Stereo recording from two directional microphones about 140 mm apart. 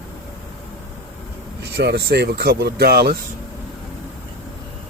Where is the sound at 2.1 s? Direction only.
90° right.